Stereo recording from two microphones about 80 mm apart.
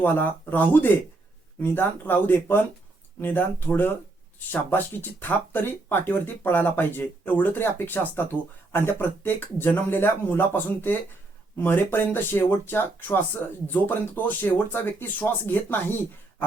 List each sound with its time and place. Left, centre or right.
0.0 s speech: left